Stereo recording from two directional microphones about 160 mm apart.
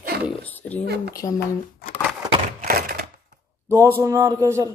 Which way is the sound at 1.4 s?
85° left.